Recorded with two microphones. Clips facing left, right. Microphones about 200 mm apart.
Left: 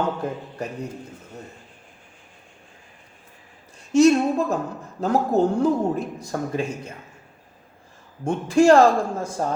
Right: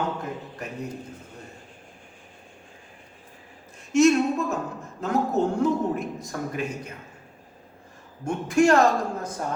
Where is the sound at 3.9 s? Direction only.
30° left (ahead or behind).